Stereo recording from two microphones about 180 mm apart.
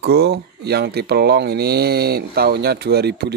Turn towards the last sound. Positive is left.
turn(degrees=-65)  # may be behind; listen again after turning